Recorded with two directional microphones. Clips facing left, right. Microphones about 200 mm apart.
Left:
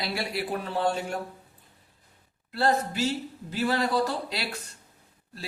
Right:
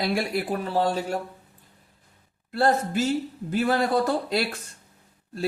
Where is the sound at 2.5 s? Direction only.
50° right (ahead or behind).